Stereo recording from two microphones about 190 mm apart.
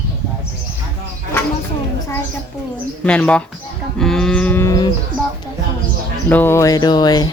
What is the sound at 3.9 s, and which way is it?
Cattle, centre (ahead or behind).